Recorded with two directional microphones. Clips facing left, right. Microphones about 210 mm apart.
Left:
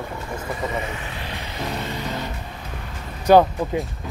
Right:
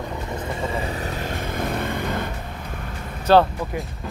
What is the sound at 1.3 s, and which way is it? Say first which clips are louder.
Vehicle: right 2 dB; 50° right (ahead or behind).